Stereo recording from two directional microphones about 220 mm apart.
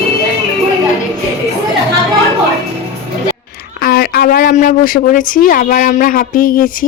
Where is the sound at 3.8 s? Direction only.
45° left (ahead or behind).